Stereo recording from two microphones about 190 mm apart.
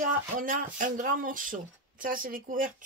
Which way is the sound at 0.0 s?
45° right (ahead or behind).